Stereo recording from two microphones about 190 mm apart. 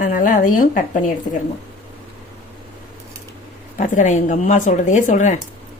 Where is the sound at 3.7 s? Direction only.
40° left (ahead or behind).